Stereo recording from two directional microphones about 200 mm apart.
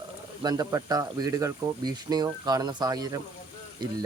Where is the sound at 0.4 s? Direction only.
20° right (ahead or behind).